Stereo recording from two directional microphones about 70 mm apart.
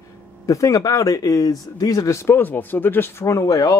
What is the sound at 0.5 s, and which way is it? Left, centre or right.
Speech, left.